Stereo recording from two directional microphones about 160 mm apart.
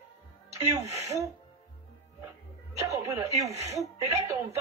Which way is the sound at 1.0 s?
20° right (ahead or behind).